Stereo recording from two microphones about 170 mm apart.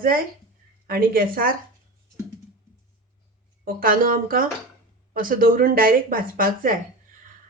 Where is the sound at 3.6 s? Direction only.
55° right (ahead or behind).